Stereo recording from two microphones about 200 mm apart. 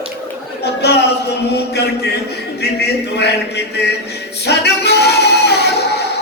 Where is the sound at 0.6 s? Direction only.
55° left (ahead or behind).